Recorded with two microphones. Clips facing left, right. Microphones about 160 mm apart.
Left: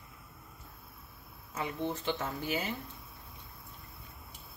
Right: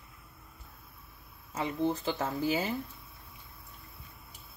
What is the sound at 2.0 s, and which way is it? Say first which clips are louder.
Speech: right 4 dB; 35° right (ahead or behind).